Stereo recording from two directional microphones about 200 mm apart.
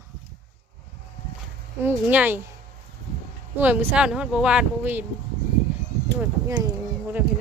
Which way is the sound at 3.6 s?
10° right (ahead or behind).